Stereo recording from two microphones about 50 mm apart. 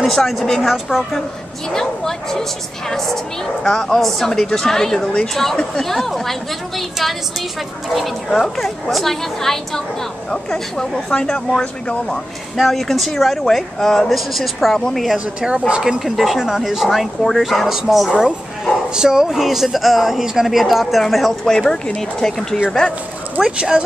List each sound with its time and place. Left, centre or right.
0.0 s a woman's voice: centre
1.7 s speech: centre
7.9 s speech: centre
12.5 s speech: centre
15.1 s speech: centre
16.0 s speech: centre